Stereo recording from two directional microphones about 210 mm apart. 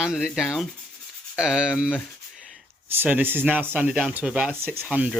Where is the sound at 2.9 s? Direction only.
10° right (ahead or behind).